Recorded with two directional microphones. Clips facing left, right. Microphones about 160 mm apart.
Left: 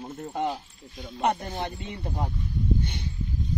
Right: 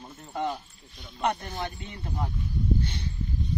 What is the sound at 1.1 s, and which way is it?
Speech, 45° left (ahead or behind).